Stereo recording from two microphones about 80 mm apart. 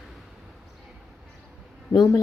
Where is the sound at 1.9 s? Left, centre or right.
Left.